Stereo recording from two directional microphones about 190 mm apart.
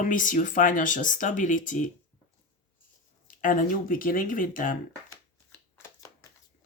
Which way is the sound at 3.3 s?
45° left (ahead or behind).